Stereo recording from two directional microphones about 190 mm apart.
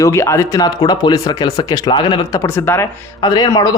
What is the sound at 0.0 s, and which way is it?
A man's voice, 15° left (ahead or behind).